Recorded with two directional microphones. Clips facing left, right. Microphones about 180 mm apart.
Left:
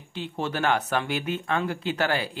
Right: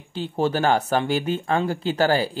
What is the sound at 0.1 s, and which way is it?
Speech, 35° right (ahead or behind).